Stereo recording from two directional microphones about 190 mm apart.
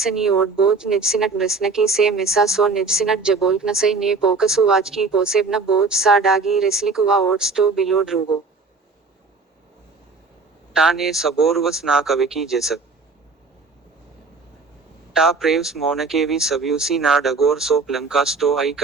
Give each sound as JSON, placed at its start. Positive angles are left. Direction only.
{"t": 0.0, "sound": "speech", "side_deg": 0}
{"t": 10.8, "sound": "speech", "side_deg": 0}
{"t": 15.1, "sound": "speech", "side_deg": -5}